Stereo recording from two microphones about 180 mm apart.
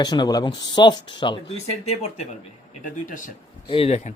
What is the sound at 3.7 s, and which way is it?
Speech, 35° left (ahead or behind).